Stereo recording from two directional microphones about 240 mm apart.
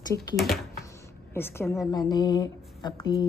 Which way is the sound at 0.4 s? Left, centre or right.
Centre.